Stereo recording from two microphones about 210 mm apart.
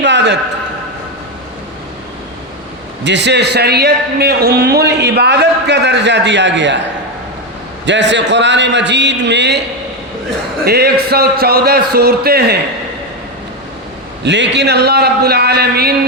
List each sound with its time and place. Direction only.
0.0 s a sound: 55° right (ahead or behind)
3.0 s a man's voice: 55° right (ahead or behind)
7.9 s a man's voice: 55° right (ahead or behind)
10.7 s a man's voice: 50° right (ahead or behind)
14.3 s a man's voice: 55° right (ahead or behind)